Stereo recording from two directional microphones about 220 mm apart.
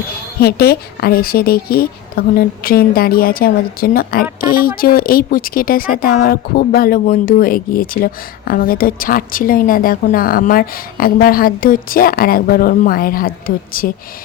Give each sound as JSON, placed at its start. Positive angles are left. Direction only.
{"t": 0.3, "sound": "a woman's voice", "side_deg": 45}